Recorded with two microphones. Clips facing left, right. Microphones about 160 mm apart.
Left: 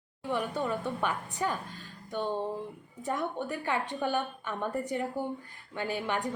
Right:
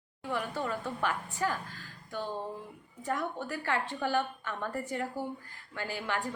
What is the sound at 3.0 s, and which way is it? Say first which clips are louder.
A woman's voice: left 2 dB; 20° left (ahead or behind).